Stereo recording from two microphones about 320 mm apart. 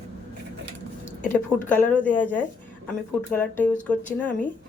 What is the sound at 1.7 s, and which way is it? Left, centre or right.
A woman's voice, centre.